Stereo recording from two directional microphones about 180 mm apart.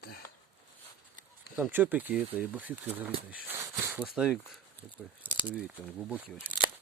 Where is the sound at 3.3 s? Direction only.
10° right (ahead or behind).